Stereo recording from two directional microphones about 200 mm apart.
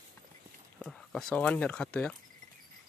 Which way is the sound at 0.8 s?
5° left (ahead or behind).